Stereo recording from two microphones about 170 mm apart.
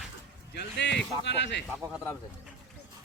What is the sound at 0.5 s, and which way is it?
Speech, 90° left.